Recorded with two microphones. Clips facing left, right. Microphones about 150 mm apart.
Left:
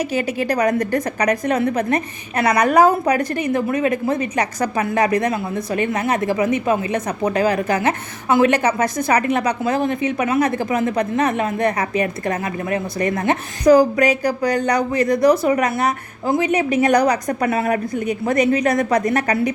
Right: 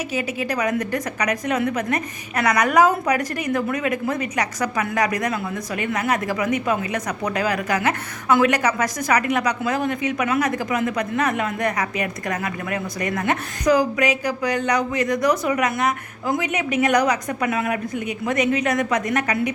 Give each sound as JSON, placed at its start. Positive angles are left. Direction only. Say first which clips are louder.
{"t": 0.2, "sound": "a woman's voice", "louder": "left 4 dB", "side_deg": 35}